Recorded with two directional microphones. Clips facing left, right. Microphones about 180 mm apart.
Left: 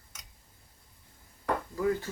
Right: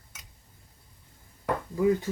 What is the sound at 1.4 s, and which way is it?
Speech, 20° right (ahead or behind).